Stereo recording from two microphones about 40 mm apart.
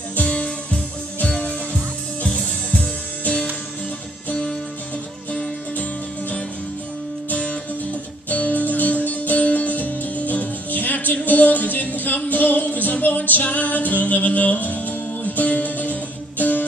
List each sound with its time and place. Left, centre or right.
0.2 s music: left
2.2 s music: centre
7.2 s music: left
13.4 s music: left